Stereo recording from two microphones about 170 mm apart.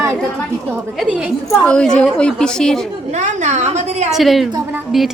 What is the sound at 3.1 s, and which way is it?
A woman's voice, 45° right (ahead or behind).